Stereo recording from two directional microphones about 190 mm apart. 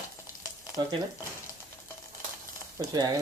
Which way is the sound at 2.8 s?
20° right (ahead or behind).